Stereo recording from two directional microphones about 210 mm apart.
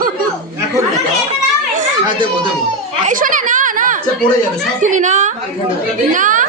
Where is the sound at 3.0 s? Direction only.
40° right (ahead or behind).